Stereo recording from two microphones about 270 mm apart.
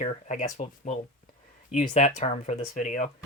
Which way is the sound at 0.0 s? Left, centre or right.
Left.